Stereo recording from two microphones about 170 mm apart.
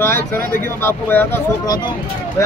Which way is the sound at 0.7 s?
15° left (ahead or behind).